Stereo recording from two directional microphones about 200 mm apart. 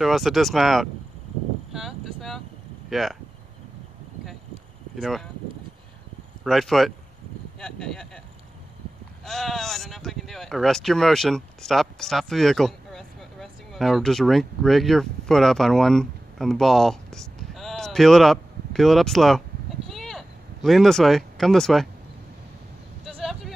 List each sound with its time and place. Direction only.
0.0 s speech: centre (ahead or behind)
1.7 s wind noise: centre (ahead or behind)
2.9 s speech: centre (ahead or behind)
4.9 s speech: centre (ahead or behind)
6.4 s speech: centre (ahead or behind)
9.2 s speech: centre (ahead or behind)
19.9 s a sound: centre (ahead or behind)
23.0 s vehicle: centre (ahead or behind)